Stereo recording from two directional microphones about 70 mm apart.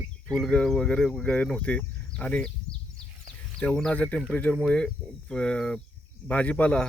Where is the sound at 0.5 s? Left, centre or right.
Centre.